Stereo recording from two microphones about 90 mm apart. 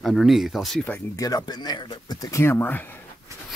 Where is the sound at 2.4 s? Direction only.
25° left (ahead or behind).